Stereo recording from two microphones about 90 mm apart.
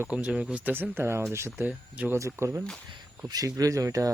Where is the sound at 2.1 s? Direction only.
30° right (ahead or behind).